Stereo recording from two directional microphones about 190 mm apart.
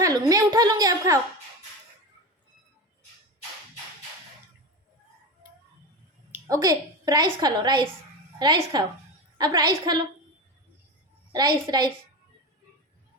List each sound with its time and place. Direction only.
0.0 s a sound: 20° right (ahead or behind)
6.3 s a woman's voice: 20° right (ahead or behind)
11.3 s a woman's voice: 20° right (ahead or behind)